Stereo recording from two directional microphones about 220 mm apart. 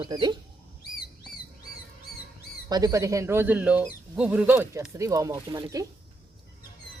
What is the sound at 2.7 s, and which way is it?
Speech, 15° right (ahead or behind).